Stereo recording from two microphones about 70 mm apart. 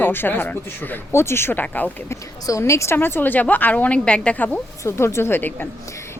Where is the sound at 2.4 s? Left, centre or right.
Left.